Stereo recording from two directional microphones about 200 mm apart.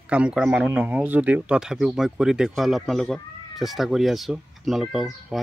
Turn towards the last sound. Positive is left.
turn(degrees=0)  # may be behind; listen again after turning